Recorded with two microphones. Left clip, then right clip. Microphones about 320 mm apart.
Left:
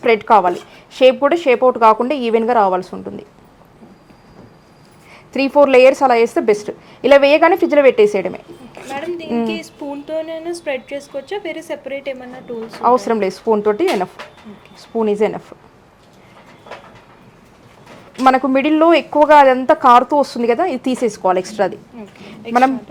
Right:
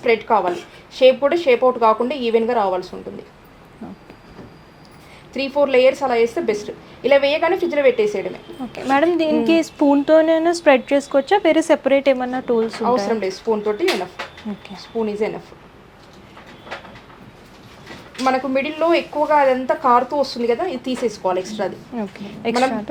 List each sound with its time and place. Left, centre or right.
0.0 s a woman's voice: left
5.3 s a woman's voice: left
8.7 s a woman's voice: right
12.8 s a woman's voice: left
14.9 s a woman's voice: left
18.2 s a woman's voice: left
21.9 s a woman's voice: right